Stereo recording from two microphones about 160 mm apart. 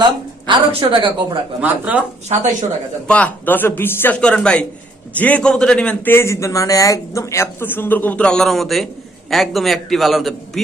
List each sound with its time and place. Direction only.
0.0 s a woman's voice: 30° right (ahead or behind)
1.6 s speech: 10° right (ahead or behind)
2.4 s speech: 50° right (ahead or behind)
3.1 s a man's voice: 10° left (ahead or behind)